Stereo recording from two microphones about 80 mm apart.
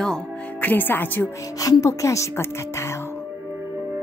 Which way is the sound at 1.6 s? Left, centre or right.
Left.